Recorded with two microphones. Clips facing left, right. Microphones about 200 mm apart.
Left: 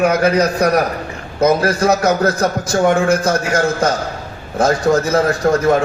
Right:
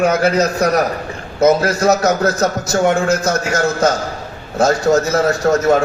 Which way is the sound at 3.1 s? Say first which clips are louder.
Left 1 dB; 30° left (ahead or behind).